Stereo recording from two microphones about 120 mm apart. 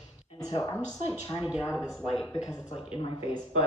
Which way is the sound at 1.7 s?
10° right (ahead or behind).